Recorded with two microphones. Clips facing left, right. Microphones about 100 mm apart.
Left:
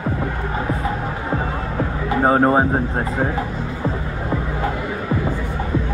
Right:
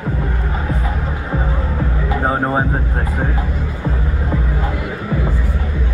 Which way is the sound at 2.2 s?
20° left (ahead or behind).